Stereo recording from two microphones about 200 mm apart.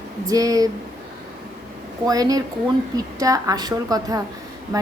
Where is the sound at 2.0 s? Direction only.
20° right (ahead or behind).